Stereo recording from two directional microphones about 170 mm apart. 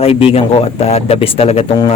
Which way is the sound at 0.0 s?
35° left (ahead or behind).